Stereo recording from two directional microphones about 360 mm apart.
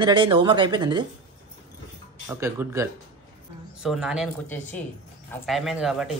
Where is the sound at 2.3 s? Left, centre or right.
Centre.